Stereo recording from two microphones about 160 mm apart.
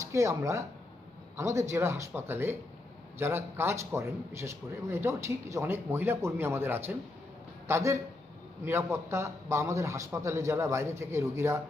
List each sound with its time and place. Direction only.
0.0 s a man's voice: 20° right (ahead or behind)